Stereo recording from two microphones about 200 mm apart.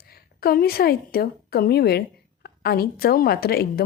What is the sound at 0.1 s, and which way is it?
A woman's voice, 50° left (ahead or behind).